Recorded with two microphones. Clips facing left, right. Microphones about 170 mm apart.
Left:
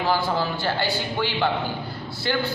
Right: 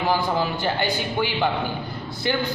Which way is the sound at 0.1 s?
15° right (ahead or behind).